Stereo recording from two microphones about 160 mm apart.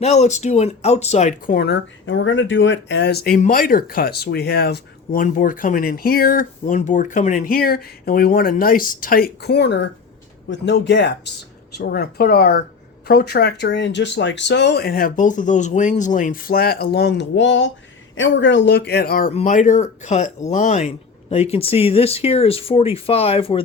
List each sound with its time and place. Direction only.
0.0 s speech: 45° left (ahead or behind)
1.5 s speech: 90° left
2.9 s speech: 90° left
5.2 s speech: 55° left (ahead or behind); by 11.1 s 90° left
11.8 s speech: 75° left (ahead or behind)
18.5 s speech: 90° left; by 19.3 s 70° left (ahead or behind)
19.3 s speech: 45° left (ahead or behind)